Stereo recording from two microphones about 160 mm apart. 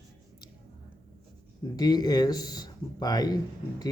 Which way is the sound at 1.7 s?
25° left (ahead or behind).